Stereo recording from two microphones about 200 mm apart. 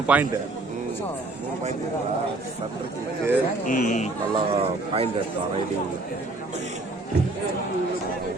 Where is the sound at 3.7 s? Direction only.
40° left (ahead or behind).